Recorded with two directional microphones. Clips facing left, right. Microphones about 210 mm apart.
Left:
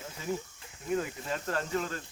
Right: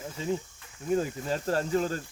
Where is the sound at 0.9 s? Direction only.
35° right (ahead or behind).